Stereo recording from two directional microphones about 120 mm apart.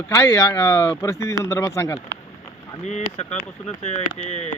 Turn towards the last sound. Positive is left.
turn(degrees=65)  # may be behind; listen again after turning